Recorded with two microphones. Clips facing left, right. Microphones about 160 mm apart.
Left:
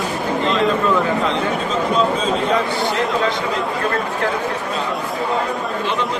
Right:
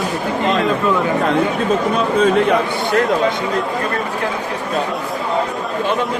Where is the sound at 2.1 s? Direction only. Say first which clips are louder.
Right 5 dB; 65° right (ahead or behind).